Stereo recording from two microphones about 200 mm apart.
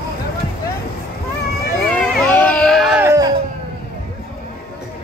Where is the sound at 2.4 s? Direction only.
5° left (ahead or behind).